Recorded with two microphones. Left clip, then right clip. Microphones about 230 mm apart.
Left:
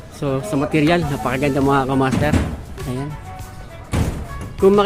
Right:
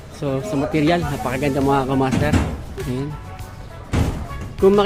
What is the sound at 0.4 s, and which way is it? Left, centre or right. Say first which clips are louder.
Speech: left 1 dB; centre.